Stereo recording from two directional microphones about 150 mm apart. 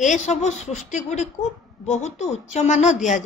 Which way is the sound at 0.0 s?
50° left (ahead or behind).